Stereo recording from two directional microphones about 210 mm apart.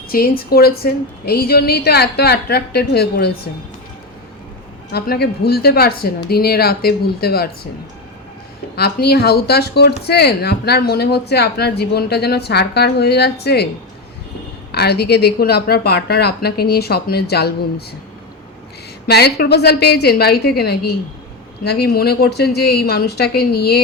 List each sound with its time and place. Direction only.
0.1 s speech: 45° left (ahead or behind)
4.9 s speech: 50° left (ahead or behind)
8.7 s speech: 50° left (ahead or behind)
14.7 s speech: 50° left (ahead or behind)
19.0 s speech: 50° left (ahead or behind)